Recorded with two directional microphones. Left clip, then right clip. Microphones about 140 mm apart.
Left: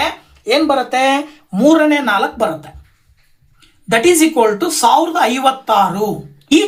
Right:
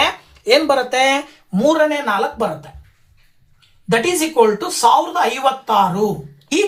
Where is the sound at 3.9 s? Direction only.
40° left (ahead or behind).